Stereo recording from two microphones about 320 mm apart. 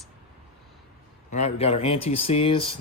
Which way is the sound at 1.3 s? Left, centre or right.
Left.